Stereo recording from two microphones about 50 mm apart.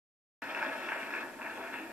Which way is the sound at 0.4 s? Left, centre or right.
Right.